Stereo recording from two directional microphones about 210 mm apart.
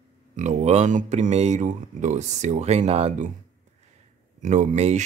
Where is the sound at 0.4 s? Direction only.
35° right (ahead or behind).